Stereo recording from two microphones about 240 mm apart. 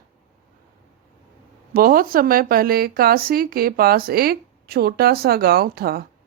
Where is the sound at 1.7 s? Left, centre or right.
Right.